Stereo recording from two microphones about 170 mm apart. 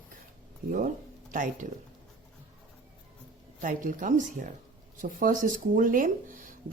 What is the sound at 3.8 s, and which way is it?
Speech, 50° right (ahead or behind).